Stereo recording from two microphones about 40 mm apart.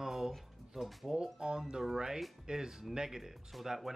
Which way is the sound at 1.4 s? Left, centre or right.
Centre.